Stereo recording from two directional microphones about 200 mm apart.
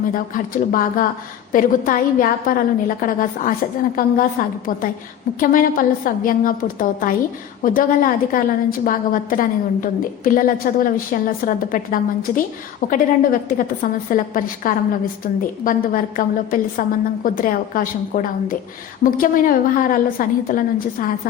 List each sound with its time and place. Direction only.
0.1 s a woman's voice: 45° left (ahead or behind)